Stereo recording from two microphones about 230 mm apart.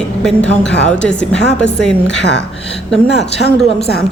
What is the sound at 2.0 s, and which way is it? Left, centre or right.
Speech, left.